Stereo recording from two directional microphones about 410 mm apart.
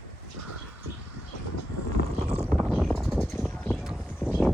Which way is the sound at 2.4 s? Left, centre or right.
Centre.